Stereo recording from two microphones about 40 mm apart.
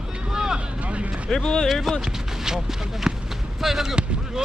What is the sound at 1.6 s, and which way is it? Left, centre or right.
Speech, centre.